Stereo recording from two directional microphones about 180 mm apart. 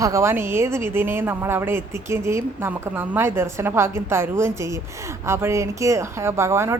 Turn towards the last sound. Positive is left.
turn(degrees=-15)  # may be behind; listen again after turning